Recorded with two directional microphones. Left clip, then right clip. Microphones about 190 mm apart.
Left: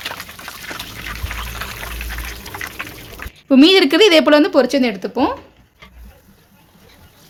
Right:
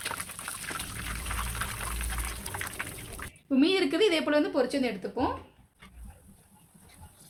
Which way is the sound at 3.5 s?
55° left (ahead or behind).